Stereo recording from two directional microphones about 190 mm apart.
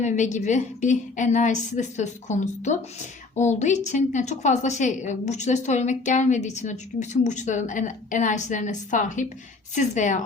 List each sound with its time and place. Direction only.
0.0 s a woman's voice: 40° left (ahead or behind)